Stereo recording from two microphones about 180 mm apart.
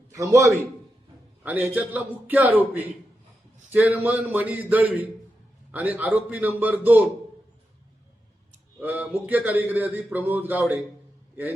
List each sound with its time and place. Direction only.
0.1 s a man's voice: 15° right (ahead or behind)
8.8 s a man's voice: 10° right (ahead or behind)